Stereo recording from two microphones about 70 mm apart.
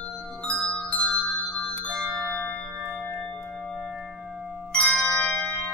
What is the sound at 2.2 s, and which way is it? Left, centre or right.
Bell, left.